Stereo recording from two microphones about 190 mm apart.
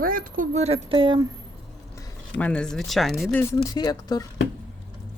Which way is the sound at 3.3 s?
15° left (ahead or behind).